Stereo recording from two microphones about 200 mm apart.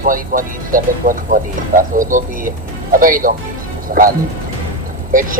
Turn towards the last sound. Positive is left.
turn(degrees=-40)  # may be behind; listen again after turning